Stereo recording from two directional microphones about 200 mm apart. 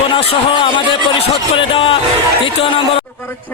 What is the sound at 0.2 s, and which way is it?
A man's voice, 25° left (ahead or behind).